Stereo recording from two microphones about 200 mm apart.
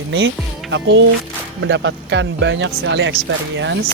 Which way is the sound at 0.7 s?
60° right (ahead or behind).